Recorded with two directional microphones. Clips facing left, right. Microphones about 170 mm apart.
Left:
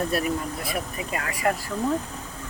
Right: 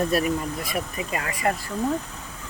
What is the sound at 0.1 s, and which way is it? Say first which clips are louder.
Speech: right 2 dB; 40° right (ahead or behind).